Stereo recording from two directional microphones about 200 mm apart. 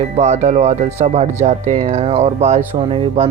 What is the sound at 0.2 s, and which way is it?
Speech, 35° right (ahead or behind).